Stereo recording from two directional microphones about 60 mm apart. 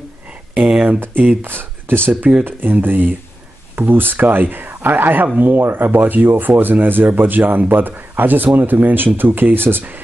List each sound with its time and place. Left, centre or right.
0.6 s speech: centre
0.9 s speech: right